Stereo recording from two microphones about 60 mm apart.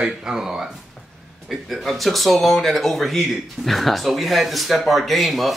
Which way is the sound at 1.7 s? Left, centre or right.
Centre.